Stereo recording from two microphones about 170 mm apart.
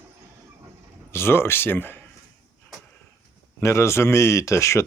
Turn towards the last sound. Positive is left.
turn(degrees=15)  # may be behind; listen again after turning